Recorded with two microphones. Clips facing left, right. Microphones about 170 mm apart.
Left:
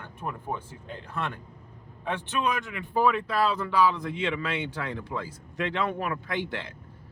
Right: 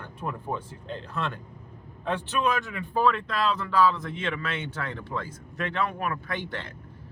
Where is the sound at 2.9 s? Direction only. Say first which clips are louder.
Left 1 dB; 15° left (ahead or behind).